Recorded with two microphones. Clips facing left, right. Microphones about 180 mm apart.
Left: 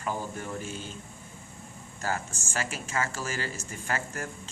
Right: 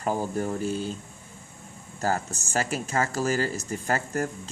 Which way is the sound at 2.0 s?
40° right (ahead or behind).